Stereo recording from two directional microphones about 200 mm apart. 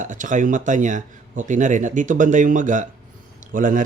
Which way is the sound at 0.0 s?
40° right (ahead or behind).